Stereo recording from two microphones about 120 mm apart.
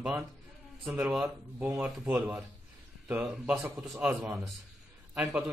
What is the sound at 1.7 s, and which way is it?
Speech, 5° right (ahead or behind).